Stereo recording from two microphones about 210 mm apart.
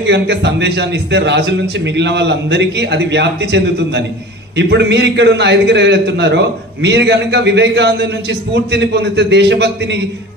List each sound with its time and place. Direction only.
0.0 s a man's voice: 55° right (ahead or behind)